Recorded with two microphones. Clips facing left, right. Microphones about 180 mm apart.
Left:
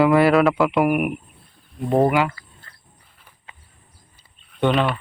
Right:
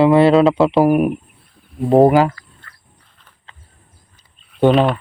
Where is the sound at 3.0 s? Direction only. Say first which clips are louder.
Even; 10° left (ahead or behind).